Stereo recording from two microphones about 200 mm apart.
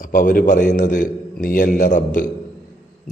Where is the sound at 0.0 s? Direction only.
40° left (ahead or behind).